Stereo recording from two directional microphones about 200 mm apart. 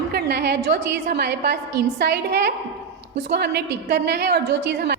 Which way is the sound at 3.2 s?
60° right (ahead or behind).